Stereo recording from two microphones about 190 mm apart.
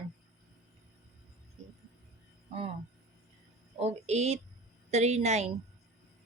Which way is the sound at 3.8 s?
35° right (ahead or behind).